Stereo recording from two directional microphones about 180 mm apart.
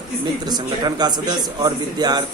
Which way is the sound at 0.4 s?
20° right (ahead or behind).